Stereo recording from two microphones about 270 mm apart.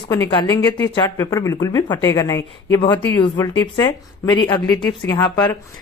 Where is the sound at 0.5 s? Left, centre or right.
Centre.